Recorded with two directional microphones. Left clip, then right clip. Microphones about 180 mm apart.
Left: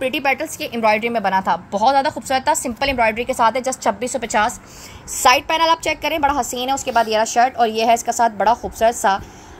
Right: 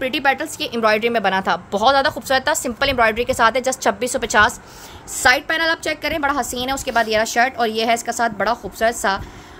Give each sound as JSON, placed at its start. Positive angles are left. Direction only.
{"t": 0.0, "sound": "a woman's voice", "side_deg": -5}
{"t": 5.3, "sound": "a woman's voice", "side_deg": -40}
{"t": 5.9, "sound": "a woman's voice", "side_deg": 0}